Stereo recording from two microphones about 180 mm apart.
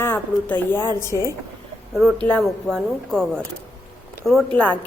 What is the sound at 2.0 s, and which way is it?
A woman's voice, 5° left (ahead or behind).